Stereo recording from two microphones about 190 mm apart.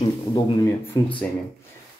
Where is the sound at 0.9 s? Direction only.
15° left (ahead or behind).